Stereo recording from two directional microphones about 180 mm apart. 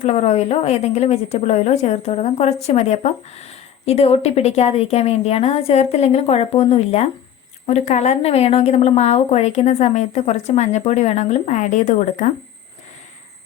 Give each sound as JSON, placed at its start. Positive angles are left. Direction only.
{"t": 0.0, "sound": "speech", "side_deg": 40}